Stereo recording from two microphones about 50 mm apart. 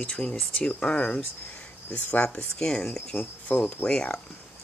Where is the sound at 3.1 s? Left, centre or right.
Left.